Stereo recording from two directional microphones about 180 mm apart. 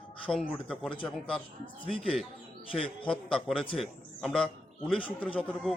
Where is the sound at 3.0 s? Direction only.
5° left (ahead or behind).